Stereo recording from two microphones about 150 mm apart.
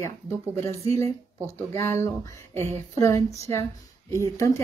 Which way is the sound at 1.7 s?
20° left (ahead or behind).